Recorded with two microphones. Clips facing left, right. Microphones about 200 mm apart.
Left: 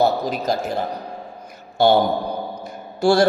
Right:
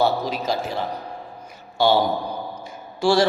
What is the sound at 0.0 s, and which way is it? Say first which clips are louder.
Speech: left 2 dB; 45° left (ahead or behind).